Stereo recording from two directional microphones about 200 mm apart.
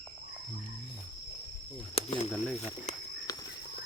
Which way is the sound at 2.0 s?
30° left (ahead or behind).